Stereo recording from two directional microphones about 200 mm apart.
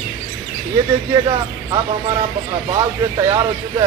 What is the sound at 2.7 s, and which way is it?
A man's voice, 20° right (ahead or behind).